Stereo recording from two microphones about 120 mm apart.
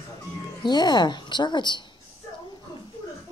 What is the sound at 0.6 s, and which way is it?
A woman's voice, 35° left (ahead or behind).